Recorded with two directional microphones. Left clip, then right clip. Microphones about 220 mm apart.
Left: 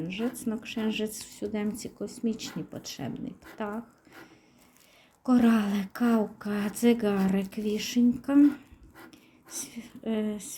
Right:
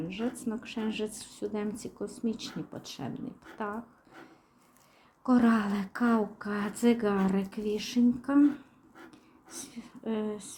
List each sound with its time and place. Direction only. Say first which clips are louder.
0.1 s a woman's voice: left 2 dB; 15° left (ahead or behind)
5.2 s a woman's voice: left 1 dB; 15° left (ahead or behind)
9.0 s whispering: left 2 dB; 20° left (ahead or behind)